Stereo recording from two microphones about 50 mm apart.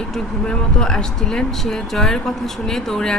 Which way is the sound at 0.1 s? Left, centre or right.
Centre.